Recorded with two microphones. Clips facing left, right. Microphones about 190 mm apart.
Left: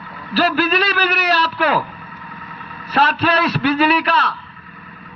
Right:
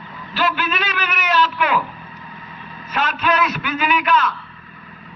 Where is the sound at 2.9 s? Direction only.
35° left (ahead or behind).